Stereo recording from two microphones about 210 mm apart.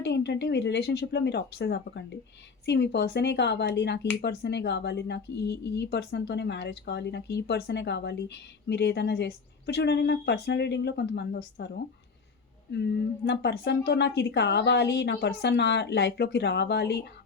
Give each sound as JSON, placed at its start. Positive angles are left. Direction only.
{"t": 0.0, "sound": "speech", "side_deg": 55}
{"t": 12.7, "sound": "speech", "side_deg": 55}